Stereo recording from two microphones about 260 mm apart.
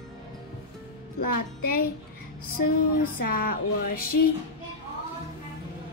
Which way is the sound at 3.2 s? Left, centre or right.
Left.